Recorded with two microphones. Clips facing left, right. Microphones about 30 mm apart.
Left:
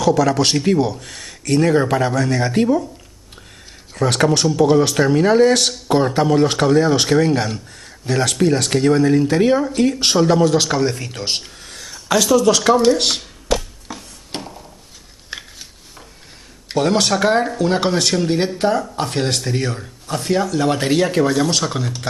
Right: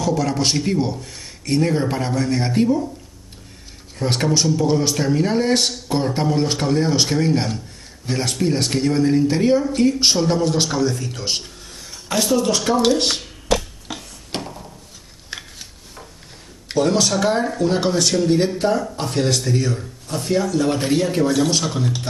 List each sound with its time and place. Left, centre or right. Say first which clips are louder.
0.0 s a man's voice: left 5 dB; left
3.9 s a man's voice: left 4 dB; left
4.5 s a man's voice: left 4 dB; left
5.9 s a man's voice: left 5 dB; left
8.1 s a man's voice: left 4 dB; left
9.4 s speech: left 2 dB; left
9.8 s a man's voice: left 1 dB; left
10.7 s speech: left 2 dB; left
11.6 s a sound: left 3 dB; left
14.3 s a sound: right 1 dB; centre
15.3 s a sound: left 1 dB; centre
16.7 s speech: left 1 dB; left
20.9 s speech: left 3 dB; left